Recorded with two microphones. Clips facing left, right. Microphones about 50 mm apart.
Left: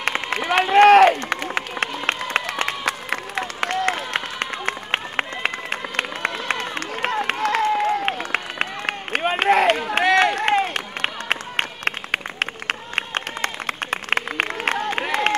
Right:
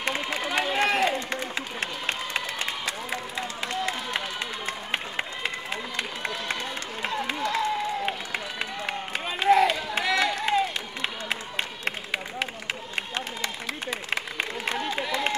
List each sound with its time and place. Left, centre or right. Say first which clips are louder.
0.0 s run: left 5 dB; left